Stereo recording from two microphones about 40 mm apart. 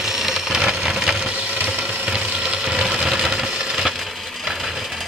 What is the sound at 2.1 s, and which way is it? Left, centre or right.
Ratchet, right.